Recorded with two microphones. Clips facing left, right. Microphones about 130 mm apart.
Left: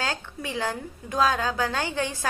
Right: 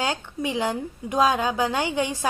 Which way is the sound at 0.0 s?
15° right (ahead or behind).